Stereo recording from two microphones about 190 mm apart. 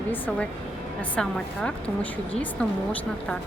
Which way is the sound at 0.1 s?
5° left (ahead or behind).